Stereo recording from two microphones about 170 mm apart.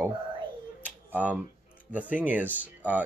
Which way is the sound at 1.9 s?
10° right (ahead or behind).